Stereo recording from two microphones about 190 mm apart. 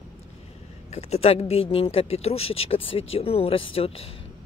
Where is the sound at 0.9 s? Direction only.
35° left (ahead or behind).